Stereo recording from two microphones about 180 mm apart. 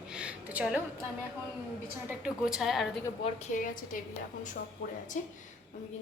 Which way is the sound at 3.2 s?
40° left (ahead or behind).